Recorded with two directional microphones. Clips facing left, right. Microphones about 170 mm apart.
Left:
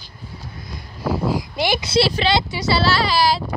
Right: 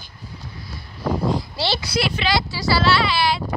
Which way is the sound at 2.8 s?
40° left (ahead or behind).